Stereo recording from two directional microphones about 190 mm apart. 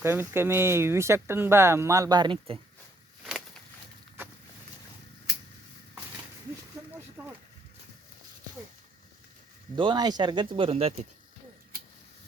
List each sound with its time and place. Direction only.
0.0 s speech: 15° right (ahead or behind)
3.2 s a sound: centre (ahead or behind)
9.7 s speech: 25° right (ahead or behind)